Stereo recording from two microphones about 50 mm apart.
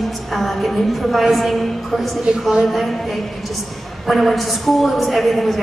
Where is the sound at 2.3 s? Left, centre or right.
Centre.